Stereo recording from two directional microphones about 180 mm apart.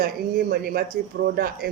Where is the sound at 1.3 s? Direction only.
55° right (ahead or behind).